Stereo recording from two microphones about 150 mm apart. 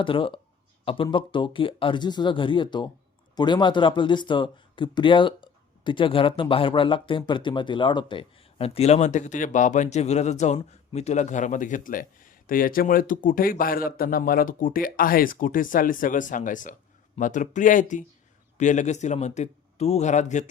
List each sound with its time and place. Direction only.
0.0 s a man's voice: 35° left (ahead or behind); by 20.4 s 55° left (ahead or behind)